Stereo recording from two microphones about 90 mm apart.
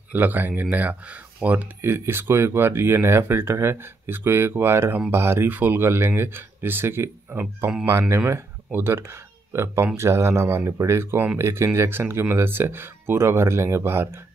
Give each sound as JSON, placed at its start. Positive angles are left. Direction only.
{"t": 0.1, "sound": "speech", "side_deg": -20}